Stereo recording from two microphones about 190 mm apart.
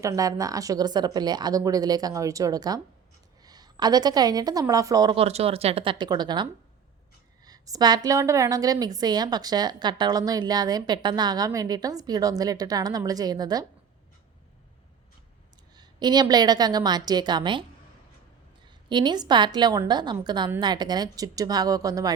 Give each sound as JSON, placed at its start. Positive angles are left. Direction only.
{"t": 0.0, "sound": "a woman's voice", "side_deg": -15}
{"t": 15.7, "sound": "a woman's voice", "side_deg": -20}
{"t": 18.9, "sound": "a woman's voice", "side_deg": -25}